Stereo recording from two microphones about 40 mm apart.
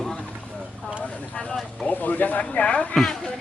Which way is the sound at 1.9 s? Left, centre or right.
Left.